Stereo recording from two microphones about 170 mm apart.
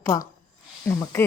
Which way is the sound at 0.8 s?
15° left (ahead or behind).